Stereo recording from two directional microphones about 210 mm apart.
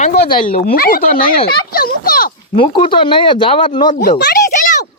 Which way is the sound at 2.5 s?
25° left (ahead or behind).